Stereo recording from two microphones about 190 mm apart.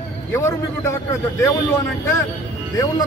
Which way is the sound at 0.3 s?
15° left (ahead or behind).